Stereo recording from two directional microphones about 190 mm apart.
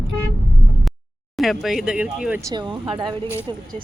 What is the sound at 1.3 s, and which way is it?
Speech, centre (ahead or behind).